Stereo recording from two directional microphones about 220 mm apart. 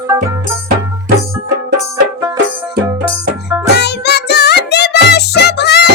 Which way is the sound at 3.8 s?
50° left (ahead or behind).